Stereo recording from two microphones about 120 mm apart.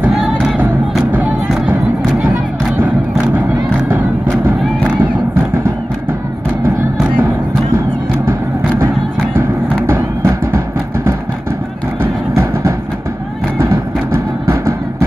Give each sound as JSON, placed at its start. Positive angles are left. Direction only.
{"t": 0.0, "sound": "music", "side_deg": -5}
{"t": 1.7, "sound": "music", "side_deg": -15}
{"t": 9.9, "sound": "music", "side_deg": -30}
{"t": 12.0, "sound": "a sound", "side_deg": -20}
{"t": 14.5, "sound": "music", "side_deg": -25}